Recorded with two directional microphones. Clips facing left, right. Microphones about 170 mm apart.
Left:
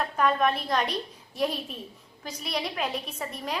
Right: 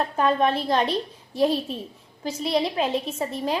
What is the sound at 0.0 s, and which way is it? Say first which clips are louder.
A child's voice: right 3 dB; 30° right (ahead or behind).